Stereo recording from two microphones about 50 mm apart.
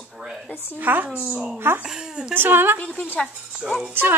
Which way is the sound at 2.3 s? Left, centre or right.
Right.